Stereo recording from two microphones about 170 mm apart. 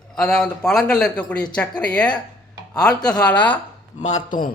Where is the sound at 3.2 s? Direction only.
10° left (ahead or behind).